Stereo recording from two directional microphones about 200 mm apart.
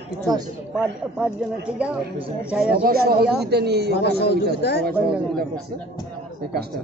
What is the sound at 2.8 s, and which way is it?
A man's voice, 50° right (ahead or behind).